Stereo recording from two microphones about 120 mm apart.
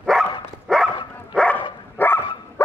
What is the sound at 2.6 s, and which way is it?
Bow-wow, 20° left (ahead or behind).